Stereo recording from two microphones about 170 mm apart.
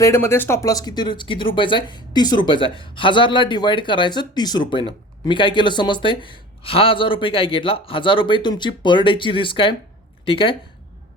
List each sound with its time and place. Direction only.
0.0 s speech: 15° left (ahead or behind); by 10.6 s 30° left (ahead or behind)